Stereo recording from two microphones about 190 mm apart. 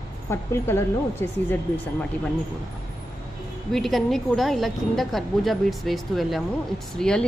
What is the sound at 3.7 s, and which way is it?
Speech, centre (ahead or behind).